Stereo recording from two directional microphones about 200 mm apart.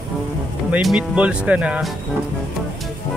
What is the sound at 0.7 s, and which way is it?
Speech, 5° right (ahead or behind).